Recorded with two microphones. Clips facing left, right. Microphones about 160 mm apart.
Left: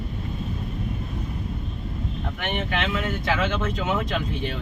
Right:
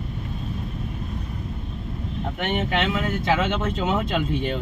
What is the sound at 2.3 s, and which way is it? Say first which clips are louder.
Speech: right 4 dB; 25° right (ahead or behind).